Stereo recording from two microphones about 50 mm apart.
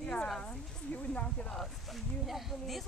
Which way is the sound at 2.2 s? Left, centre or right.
Centre.